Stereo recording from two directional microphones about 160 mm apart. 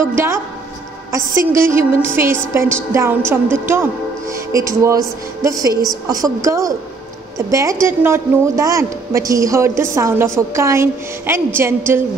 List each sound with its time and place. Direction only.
0.0 s a woman's voice: 15° right (ahead or behind)